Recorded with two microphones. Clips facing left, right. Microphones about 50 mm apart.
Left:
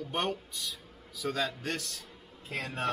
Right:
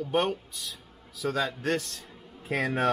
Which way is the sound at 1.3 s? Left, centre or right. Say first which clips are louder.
Right 7 dB; centre.